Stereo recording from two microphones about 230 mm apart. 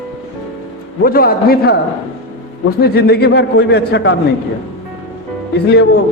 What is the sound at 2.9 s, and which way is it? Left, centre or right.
A man's voice, left.